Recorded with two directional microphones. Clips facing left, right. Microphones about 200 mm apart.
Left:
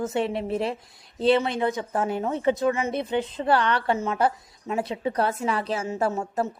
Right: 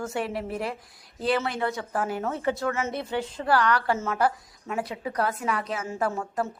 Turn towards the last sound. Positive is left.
turn(degrees=20)  # may be behind; listen again after turning